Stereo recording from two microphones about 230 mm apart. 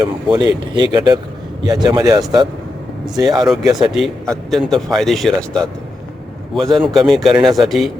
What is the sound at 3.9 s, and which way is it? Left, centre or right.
A man's voice, centre.